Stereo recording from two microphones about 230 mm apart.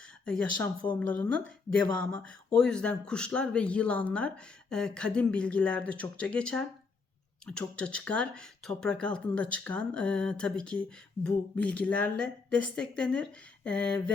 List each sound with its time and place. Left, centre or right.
0.0 s a woman's voice: centre